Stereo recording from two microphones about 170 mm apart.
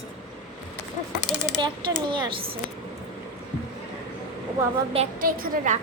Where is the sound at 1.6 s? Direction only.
30° right (ahead or behind).